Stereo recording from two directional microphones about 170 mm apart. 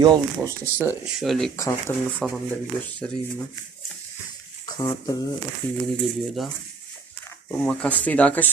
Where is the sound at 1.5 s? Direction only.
15° left (ahead or behind).